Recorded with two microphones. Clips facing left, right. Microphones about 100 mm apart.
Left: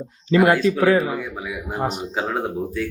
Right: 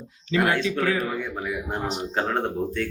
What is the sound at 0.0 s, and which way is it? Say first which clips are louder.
Speech: left 7 dB; 45° left (ahead or behind).